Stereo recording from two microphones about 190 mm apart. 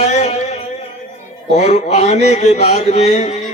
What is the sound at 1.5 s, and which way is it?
A man's voice, 35° left (ahead or behind).